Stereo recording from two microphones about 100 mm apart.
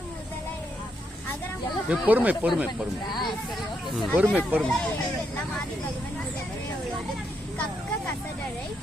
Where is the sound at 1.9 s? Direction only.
15° right (ahead or behind).